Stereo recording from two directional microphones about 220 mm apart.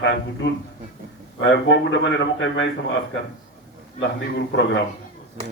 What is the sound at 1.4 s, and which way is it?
A man's voice, 55° left (ahead or behind).